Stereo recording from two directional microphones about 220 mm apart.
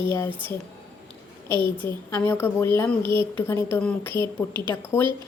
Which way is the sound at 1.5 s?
10° left (ahead or behind).